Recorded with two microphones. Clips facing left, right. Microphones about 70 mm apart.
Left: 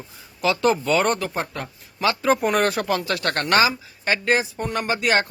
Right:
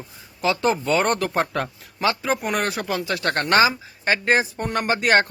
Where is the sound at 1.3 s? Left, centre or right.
Right.